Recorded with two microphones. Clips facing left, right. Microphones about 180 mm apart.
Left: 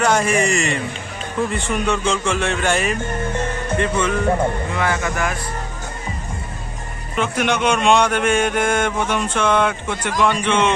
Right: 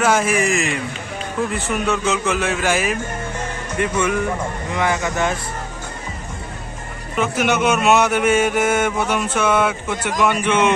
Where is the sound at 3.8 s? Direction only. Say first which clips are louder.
Right 1 dB; 10° right (ahead or behind).